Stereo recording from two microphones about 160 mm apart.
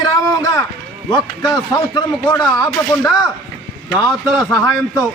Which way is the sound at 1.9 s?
30° left (ahead or behind).